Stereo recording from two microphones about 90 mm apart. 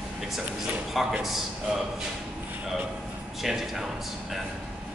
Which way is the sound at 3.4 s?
5° right (ahead or behind).